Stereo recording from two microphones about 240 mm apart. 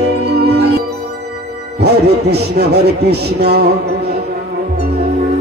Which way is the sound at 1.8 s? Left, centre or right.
Right.